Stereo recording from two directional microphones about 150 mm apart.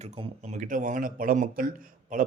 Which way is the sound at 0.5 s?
60° right (ahead or behind).